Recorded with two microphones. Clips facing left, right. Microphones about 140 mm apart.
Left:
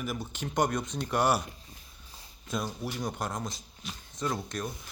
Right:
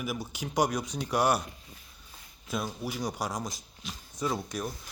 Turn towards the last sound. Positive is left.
turn(degrees=-5)  # may be behind; listen again after turning